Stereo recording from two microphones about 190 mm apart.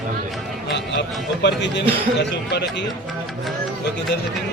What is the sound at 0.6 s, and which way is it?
Speech, 65° left (ahead or behind).